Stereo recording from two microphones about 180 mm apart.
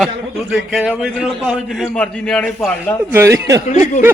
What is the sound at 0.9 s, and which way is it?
Speech, centre (ahead or behind).